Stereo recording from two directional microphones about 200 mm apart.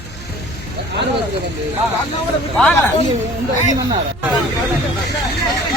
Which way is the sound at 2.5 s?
5° left (ahead or behind).